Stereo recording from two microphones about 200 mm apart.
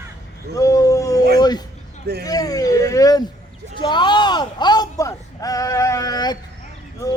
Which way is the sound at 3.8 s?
25° left (ahead or behind).